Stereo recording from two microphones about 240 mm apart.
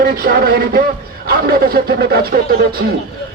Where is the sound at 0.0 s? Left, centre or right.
Right.